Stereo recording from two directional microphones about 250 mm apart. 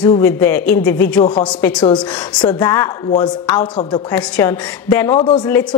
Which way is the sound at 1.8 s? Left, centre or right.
Left.